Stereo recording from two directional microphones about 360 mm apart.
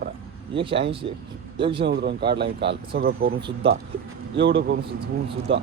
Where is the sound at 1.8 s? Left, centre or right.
Right.